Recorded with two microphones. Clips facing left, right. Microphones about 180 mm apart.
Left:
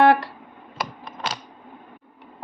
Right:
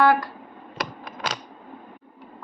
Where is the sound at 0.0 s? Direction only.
25° left (ahead or behind).